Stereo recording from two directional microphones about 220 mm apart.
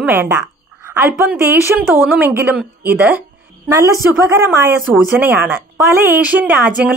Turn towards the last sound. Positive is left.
turn(degrees=-5)  # may be behind; listen again after turning